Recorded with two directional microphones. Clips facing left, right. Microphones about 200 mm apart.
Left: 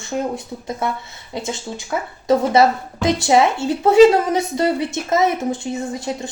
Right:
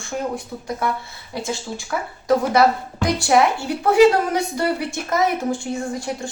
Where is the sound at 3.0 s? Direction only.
20° left (ahead or behind).